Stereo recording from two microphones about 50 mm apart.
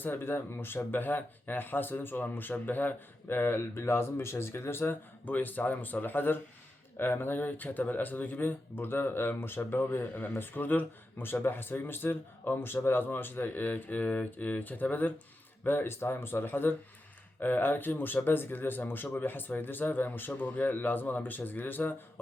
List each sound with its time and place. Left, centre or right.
0.0 s speech: left
15.6 s speech: left